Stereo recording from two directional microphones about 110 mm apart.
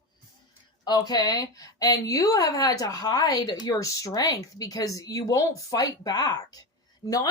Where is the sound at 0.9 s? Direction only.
35° left (ahead or behind).